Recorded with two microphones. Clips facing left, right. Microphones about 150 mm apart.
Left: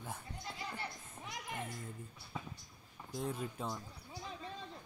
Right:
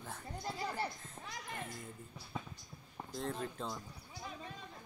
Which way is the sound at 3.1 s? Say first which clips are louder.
Even; 10° left (ahead or behind).